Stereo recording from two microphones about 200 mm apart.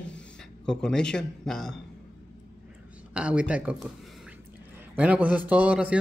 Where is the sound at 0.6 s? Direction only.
5° left (ahead or behind).